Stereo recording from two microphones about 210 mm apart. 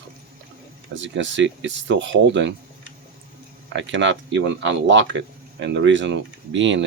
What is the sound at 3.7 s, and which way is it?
Speech, 60° right (ahead or behind).